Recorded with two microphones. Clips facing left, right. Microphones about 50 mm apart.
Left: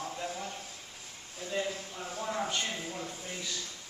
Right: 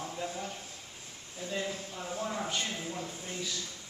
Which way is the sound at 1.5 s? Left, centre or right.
Centre.